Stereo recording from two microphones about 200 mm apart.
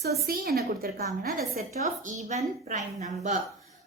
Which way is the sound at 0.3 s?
50° right (ahead or behind).